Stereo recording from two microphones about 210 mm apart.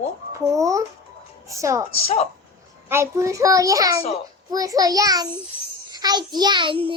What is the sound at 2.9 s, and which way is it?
A child's voice, 15° right (ahead or behind).